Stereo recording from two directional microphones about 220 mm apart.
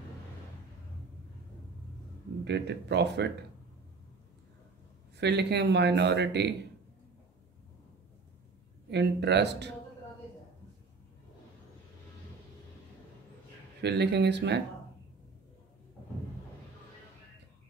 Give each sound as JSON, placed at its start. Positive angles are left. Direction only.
{"t": 2.4, "sound": "a man's voice", "side_deg": -50}
{"t": 5.1, "sound": "a man's voice", "side_deg": -50}
{"t": 8.9, "sound": "a man's voice", "side_deg": -50}
{"t": 13.7, "sound": "a man's voice", "side_deg": -50}